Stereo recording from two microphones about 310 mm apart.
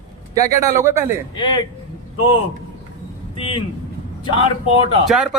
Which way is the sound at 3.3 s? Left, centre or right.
Centre.